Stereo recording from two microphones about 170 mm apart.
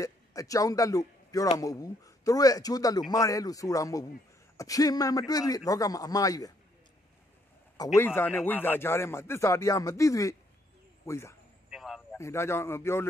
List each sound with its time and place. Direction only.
0.0 s a man's voice: 20° left (ahead or behind)
7.7 s speech: 15° left (ahead or behind)
11.7 s a sound: centre (ahead or behind)
12.2 s speech: 15° left (ahead or behind)